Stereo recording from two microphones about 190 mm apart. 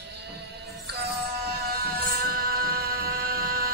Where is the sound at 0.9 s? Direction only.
60° right (ahead or behind).